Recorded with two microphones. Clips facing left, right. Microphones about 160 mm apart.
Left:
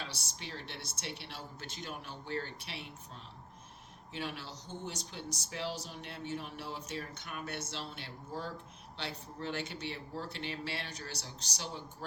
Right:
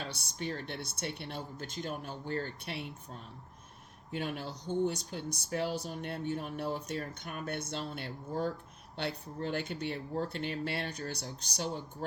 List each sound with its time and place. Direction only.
0.0 s speech: 50° right (ahead or behind)